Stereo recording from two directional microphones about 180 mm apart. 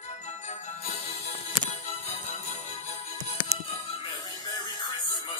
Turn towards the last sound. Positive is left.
turn(degrees=25)  # may be behind; listen again after turning